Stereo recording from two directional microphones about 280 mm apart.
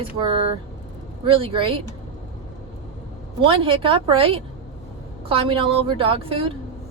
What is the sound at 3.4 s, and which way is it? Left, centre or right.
A woman's voice, centre.